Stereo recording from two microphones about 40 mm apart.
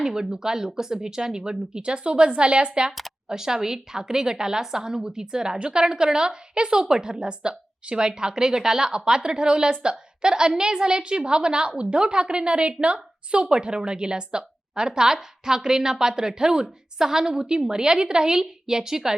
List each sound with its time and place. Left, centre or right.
0.0 s a woman's voice: centre
3.2 s a woman's voice: centre